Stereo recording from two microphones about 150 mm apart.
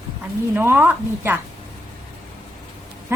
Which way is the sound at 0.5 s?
15° right (ahead or behind).